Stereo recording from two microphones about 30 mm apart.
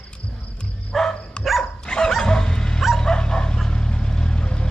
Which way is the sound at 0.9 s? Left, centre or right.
Centre.